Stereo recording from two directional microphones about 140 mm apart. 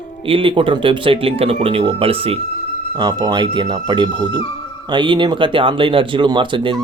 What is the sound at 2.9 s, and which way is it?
Speech, 30° right (ahead or behind).